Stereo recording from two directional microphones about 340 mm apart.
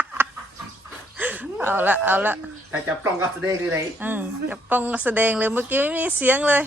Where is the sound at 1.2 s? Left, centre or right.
Centre.